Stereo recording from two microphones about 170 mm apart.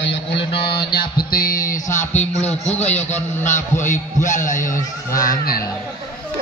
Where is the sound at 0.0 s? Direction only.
90° left.